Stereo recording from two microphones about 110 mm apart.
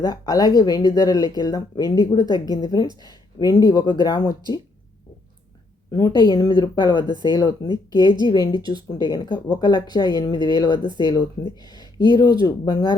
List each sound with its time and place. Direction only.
0.0 s speech: 35° left (ahead or behind)
5.9 s speech: 35° left (ahead or behind)